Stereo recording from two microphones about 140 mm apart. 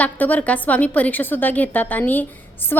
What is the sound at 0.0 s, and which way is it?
A woman's voice, 10° left (ahead or behind).